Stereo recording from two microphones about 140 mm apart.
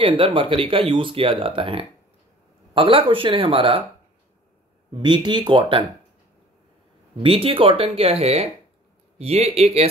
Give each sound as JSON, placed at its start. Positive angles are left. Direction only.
{"t": 0.0, "sound": "speech", "side_deg": -40}
{"t": 4.9, "sound": "speech", "side_deg": -30}
{"t": 7.2, "sound": "speech", "side_deg": -40}